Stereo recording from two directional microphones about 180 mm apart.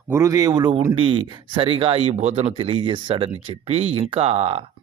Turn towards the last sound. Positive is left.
turn(degrees=-30)  # may be behind; listen again after turning